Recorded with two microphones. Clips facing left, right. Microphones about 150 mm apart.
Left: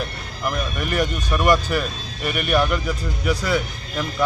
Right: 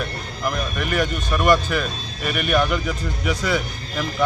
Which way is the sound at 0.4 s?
5° left (ahead or behind).